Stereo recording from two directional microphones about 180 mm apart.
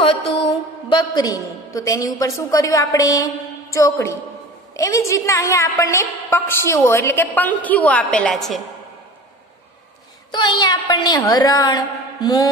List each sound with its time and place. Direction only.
0.0 s mantra: 30° left (ahead or behind)
0.4 s a woman's voice: 30° left (ahead or behind); by 8.6 s centre (ahead or behind)
10.3 s a woman's voice: 25° left (ahead or behind)